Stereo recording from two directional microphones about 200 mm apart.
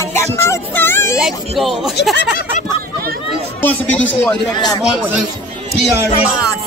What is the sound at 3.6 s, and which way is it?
Speech, 10° left (ahead or behind).